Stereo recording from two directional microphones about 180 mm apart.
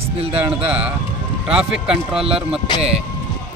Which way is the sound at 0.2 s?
35° right (ahead or behind).